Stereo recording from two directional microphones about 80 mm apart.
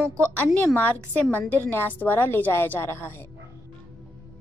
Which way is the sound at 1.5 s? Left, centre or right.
Left.